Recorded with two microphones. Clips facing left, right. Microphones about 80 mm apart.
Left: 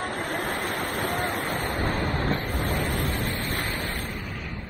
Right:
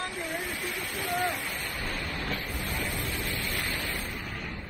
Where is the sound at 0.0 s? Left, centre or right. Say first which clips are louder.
Left 5 dB; left.